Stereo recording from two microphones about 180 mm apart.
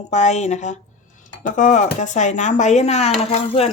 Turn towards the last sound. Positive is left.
turn(degrees=35)  # may be behind; listen again after turning